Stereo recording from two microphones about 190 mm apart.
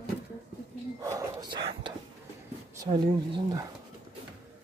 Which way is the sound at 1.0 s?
15° right (ahead or behind).